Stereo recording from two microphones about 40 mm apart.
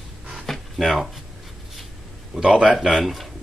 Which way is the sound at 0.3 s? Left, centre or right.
Centre.